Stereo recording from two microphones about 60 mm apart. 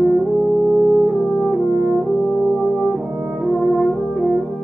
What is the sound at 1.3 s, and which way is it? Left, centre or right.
French horn, centre.